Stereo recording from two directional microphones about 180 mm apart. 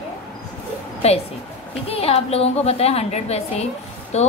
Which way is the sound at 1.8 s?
35° left (ahead or behind).